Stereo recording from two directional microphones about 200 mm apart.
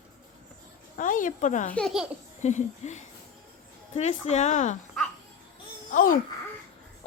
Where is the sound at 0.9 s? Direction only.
40° left (ahead or behind).